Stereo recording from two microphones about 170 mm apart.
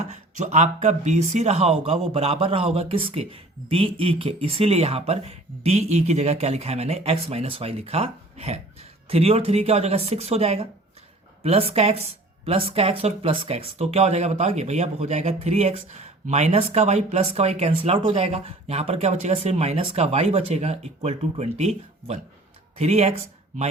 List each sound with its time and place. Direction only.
0.0 s speech: 45° right (ahead or behind)